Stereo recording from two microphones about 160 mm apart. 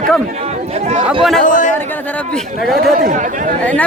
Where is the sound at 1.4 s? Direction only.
55° left (ahead or behind).